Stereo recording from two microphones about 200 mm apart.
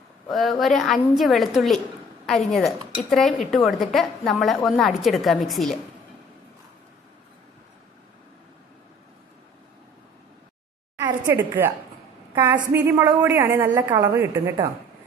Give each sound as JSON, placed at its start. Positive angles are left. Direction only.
{"t": 0.3, "sound": "a woman's voice", "side_deg": 0}
{"t": 11.0, "sound": "a woman's voice", "side_deg": -10}
{"t": 12.7, "sound": "a woman's voice", "side_deg": -15}